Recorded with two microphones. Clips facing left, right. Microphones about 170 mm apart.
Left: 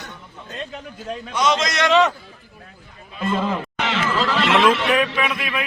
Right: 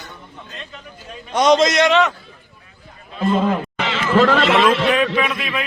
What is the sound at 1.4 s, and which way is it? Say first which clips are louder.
Speech: right 7 dB; 40° right (ahead or behind).